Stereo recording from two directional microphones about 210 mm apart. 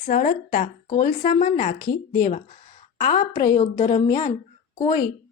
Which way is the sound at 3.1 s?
40° left (ahead or behind).